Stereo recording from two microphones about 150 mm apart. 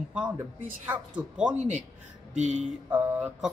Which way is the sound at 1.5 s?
50° right (ahead or behind).